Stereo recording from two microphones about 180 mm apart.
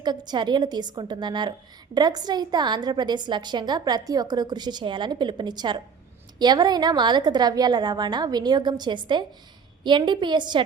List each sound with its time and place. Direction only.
0.3 s a woman's voice: 25° right (ahead or behind)